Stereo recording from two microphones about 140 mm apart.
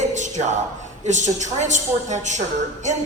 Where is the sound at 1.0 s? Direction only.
60° right (ahead or behind).